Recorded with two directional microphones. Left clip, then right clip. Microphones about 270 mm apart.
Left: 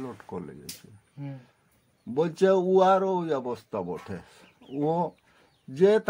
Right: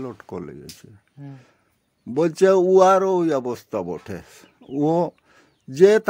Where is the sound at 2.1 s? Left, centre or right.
Right.